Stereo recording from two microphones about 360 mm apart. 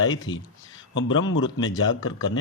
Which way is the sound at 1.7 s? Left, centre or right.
Centre.